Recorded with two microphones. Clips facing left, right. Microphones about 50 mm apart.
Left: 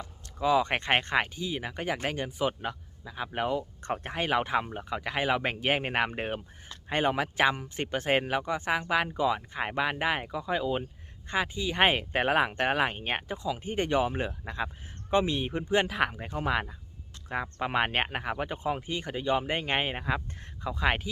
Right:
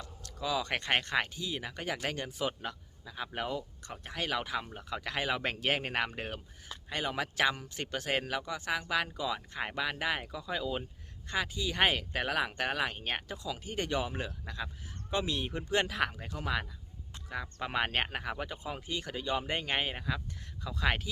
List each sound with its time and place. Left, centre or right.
0.0 s a sound: left
1.0 s speech: left
3.8 s speech: left
4.2 s speech: left